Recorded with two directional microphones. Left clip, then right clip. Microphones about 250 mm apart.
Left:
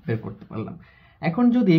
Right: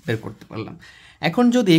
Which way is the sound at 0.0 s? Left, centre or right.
Right.